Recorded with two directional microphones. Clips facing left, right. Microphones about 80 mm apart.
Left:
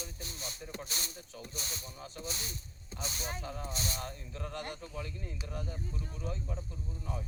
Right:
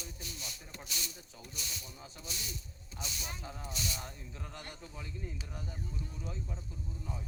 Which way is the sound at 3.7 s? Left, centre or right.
Left.